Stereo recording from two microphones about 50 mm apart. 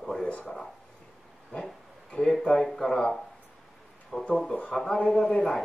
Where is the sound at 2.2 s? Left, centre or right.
Centre.